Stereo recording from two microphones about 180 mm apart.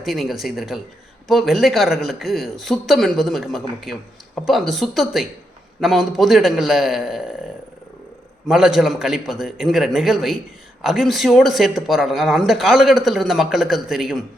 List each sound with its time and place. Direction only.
0.0 s speech: centre (ahead or behind)
8.4 s speech: 5° right (ahead or behind)